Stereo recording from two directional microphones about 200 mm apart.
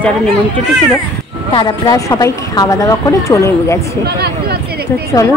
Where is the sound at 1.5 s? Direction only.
20° left (ahead or behind).